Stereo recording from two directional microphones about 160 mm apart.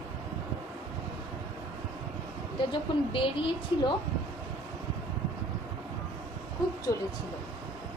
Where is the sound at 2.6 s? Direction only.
30° left (ahead or behind).